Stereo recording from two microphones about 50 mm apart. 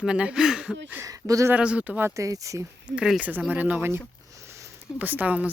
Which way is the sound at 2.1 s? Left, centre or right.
Right.